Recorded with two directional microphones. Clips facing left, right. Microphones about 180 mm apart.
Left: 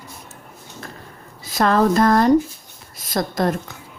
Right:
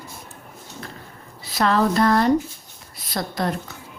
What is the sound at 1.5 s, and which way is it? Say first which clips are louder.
Speech: left 3 dB; 45° left (ahead or behind).